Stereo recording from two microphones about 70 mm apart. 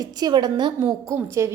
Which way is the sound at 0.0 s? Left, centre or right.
Right.